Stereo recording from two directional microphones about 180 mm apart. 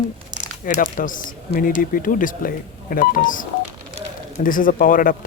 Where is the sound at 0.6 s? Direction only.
50° left (ahead or behind).